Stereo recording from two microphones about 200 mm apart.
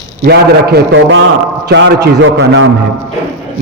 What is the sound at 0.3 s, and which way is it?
A man's voice, 60° right (ahead or behind).